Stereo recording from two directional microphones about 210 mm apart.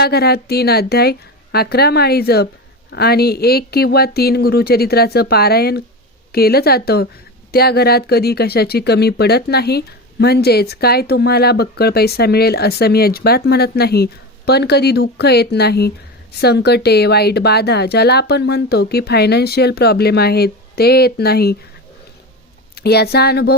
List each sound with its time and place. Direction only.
0.0 s speech: 50° left (ahead or behind)
22.7 s speech: 50° left (ahead or behind)